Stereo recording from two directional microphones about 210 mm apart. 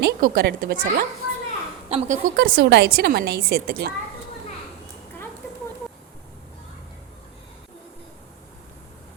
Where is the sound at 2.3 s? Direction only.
45° right (ahead or behind).